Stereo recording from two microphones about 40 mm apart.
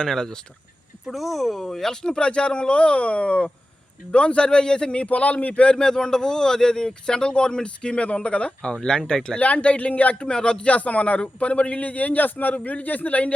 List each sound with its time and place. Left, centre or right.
0.0 s speech: centre
1.0 s speech: centre; by 5.0 s left
5.0 s speech: left
5.7 s speech: centre
9.4 s speech: left
10.2 s speech: left